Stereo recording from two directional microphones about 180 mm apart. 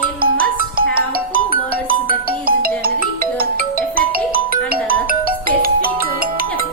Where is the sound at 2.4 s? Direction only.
55° right (ahead or behind).